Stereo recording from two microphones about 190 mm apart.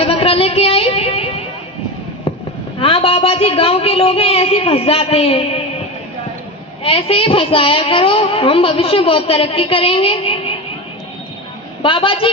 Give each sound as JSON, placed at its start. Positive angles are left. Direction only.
{"t": 0.0, "sound": "a sound", "side_deg": 30}
{"t": 2.8, "sound": "a man's voice", "side_deg": 30}
{"t": 6.8, "sound": "a woman's voice", "side_deg": 30}
{"t": 11.8, "sound": "a woman's voice", "side_deg": 25}